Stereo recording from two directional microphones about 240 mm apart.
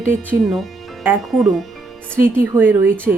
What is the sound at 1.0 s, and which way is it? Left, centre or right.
Speech, centre.